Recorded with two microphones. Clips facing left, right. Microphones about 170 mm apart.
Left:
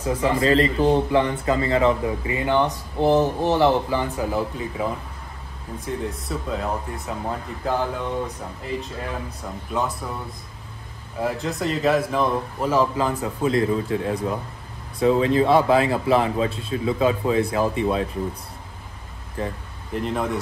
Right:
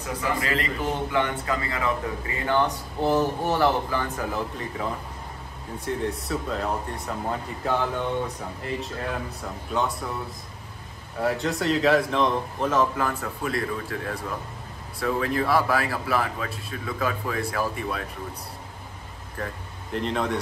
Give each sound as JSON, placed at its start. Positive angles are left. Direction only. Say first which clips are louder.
{"t": 0.2, "sound": "a man's voice", "louder": "left 9 dB", "side_deg": 30}
{"t": 5.9, "sound": "speech", "louder": "right 1 dB", "side_deg": 0}
{"t": 11.1, "sound": "a man's voice", "louder": "even", "side_deg": 0}
{"t": 19.9, "sound": "speech", "louder": "left 1 dB", "side_deg": 5}